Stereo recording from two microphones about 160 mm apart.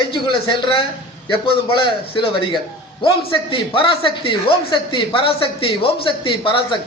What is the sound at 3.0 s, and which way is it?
A man's voice, 30° left (ahead or behind).